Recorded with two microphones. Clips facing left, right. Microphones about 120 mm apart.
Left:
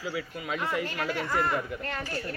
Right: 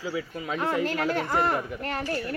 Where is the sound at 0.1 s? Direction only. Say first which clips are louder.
Right 2 dB; 30° right (ahead or behind).